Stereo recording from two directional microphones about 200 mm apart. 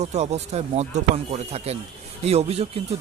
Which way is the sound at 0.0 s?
35° right (ahead or behind).